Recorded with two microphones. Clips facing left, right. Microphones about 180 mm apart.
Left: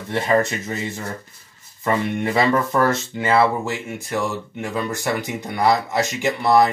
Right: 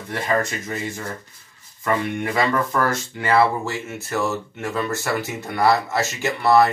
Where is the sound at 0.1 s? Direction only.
25° left (ahead or behind).